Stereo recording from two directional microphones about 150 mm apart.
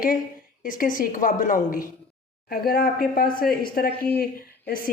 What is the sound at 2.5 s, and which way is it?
A woman's voice, 80° left.